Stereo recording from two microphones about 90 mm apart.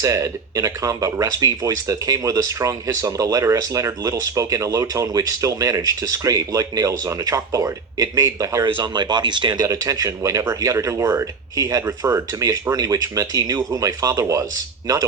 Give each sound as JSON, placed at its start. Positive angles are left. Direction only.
{"t": 0.0, "sound": "speech", "side_deg": -35}
{"t": 8.8, "sound": "speech", "side_deg": -50}
{"t": 9.6, "sound": "speech", "side_deg": -40}